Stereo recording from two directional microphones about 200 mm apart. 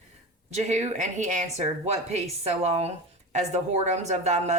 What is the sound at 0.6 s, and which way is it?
A woman's voice, 35° right (ahead or behind).